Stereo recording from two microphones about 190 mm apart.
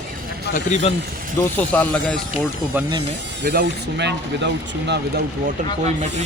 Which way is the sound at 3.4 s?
60° right (ahead or behind).